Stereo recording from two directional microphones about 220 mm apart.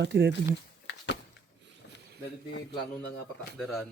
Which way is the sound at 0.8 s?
55° left (ahead or behind).